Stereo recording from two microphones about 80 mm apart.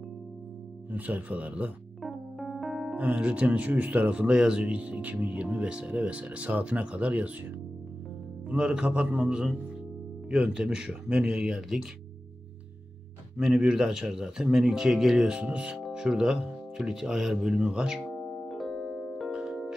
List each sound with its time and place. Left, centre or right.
0.9 s speech: centre
2.0 s piano: centre
3.0 s speech: centre
8.5 s speech: centre
13.4 s speech: centre
18.0 s keyboard: centre
19.3 s music: centre